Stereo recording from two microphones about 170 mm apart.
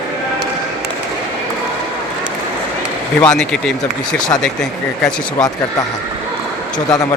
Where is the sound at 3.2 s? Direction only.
5° left (ahead or behind).